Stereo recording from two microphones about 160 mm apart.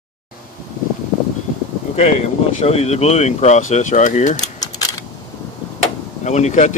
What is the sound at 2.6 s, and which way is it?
Speech, 40° left (ahead or behind).